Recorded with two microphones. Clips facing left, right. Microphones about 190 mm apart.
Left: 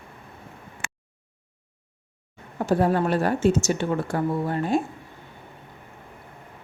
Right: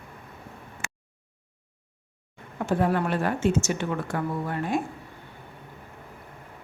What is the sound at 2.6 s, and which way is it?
Speech, 35° left (ahead or behind).